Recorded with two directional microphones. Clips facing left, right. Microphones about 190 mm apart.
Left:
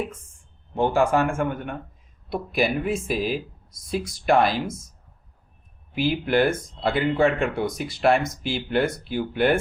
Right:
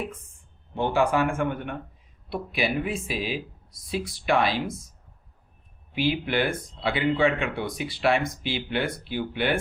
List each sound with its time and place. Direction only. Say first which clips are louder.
0.8 s speech: left 3 dB; 45° left (ahead or behind)
5.9 s speech: left 3 dB; 45° left (ahead or behind)